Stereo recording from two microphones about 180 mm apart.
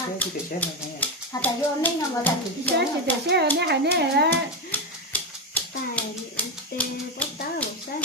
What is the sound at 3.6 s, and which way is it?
Speech, 65° right (ahead or behind).